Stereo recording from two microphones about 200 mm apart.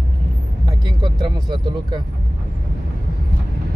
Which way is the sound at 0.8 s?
20° right (ahead or behind).